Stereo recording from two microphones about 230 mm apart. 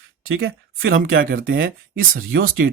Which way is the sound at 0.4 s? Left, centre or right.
Right.